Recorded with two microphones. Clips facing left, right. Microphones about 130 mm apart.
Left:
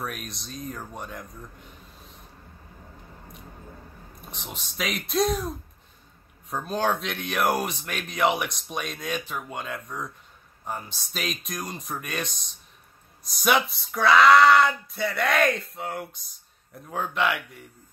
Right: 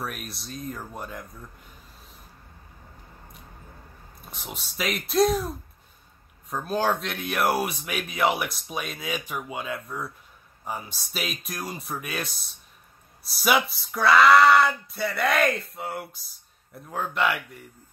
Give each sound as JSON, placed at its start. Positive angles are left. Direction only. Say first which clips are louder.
{"t": 0.0, "sound": "speech", "louder": "even", "side_deg": 0}
{"t": 4.3, "sound": "speech", "louder": "right 1 dB", "side_deg": -5}